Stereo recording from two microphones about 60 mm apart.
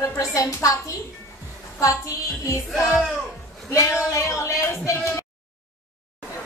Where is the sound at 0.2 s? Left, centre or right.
Left.